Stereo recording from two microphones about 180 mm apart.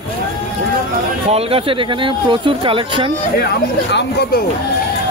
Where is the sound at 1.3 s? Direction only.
30° right (ahead or behind).